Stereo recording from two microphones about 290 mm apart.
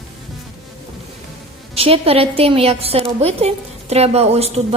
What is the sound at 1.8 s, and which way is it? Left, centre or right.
A woman's voice, centre.